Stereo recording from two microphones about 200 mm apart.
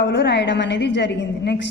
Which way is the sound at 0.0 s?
60° left (ahead or behind).